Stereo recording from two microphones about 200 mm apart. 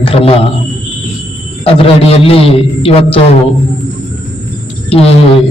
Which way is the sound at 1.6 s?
30° left (ahead or behind).